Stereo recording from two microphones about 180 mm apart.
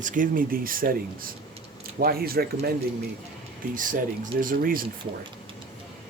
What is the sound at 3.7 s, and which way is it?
Speech, 45° right (ahead or behind).